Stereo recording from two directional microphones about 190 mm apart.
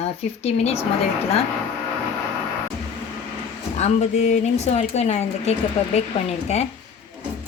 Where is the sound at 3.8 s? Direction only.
35° left (ahead or behind).